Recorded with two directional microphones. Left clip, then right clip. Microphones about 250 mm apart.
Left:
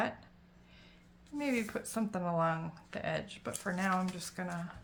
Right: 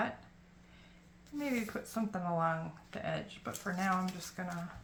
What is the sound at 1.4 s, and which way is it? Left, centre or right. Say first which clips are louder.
Speech: left 2 dB; left.